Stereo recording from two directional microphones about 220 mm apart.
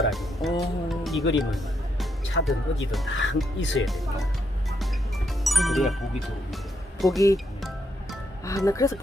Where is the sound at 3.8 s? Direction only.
Centre (ahead or behind).